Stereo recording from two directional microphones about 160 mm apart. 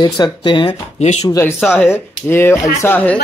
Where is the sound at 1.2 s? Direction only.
20° left (ahead or behind).